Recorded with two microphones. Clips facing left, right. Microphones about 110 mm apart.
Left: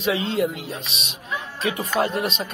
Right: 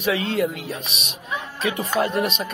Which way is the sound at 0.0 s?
25° left (ahead or behind).